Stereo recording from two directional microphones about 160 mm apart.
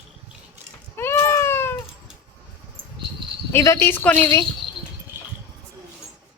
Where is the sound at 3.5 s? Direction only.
15° left (ahead or behind).